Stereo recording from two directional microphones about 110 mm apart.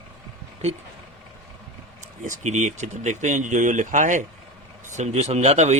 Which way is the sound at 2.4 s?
90° right.